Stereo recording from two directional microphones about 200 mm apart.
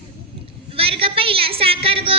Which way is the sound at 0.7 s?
30° right (ahead or behind).